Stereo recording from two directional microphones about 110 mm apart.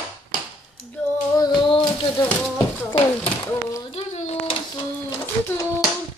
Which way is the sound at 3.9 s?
80° left.